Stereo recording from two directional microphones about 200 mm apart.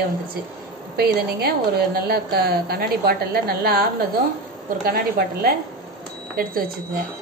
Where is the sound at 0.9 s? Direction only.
50° right (ahead or behind).